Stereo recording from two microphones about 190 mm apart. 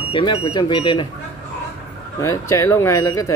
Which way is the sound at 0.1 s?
25° left (ahead or behind).